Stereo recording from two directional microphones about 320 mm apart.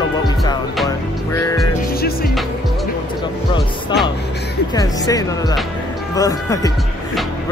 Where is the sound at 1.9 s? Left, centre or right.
Left.